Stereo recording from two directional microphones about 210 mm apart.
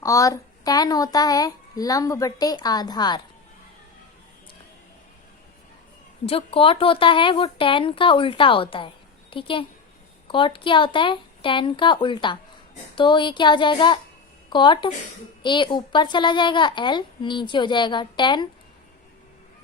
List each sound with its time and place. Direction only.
0.0 s speech: 15° left (ahead or behind)
6.2 s speech: 25° left (ahead or behind)